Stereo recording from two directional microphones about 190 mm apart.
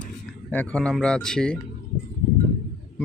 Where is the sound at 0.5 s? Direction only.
5° left (ahead or behind).